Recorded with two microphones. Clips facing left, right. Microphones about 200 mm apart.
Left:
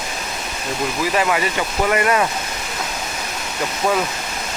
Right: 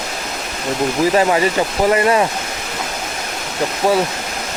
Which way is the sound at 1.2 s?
35° right (ahead or behind).